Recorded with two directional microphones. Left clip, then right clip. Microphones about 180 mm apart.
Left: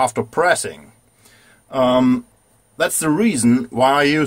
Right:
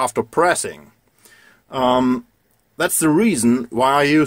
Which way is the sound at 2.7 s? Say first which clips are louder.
Right 1 dB; 50° right (ahead or behind).